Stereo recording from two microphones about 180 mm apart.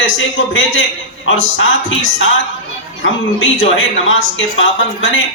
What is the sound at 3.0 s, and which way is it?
A man's voice, 90° left.